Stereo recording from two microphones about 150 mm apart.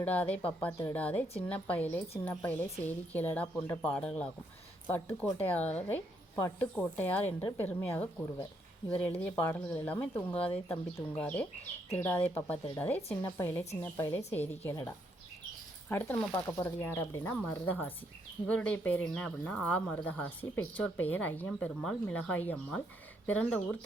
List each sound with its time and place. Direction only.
0.0 s speech: 10° left (ahead or behind)
13.0 s speech: 40° left (ahead or behind)
13.3 s speech: 15° left (ahead or behind)